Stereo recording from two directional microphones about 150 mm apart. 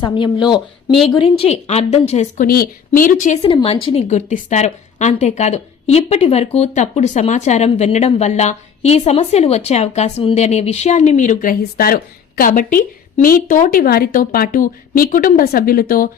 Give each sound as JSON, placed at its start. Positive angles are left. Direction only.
{"t": 0.1, "sound": "a woman's voice", "side_deg": 30}
{"t": 2.4, "sound": "a woman's voice", "side_deg": 75}
{"t": 3.4, "sound": "a woman's voice", "side_deg": 40}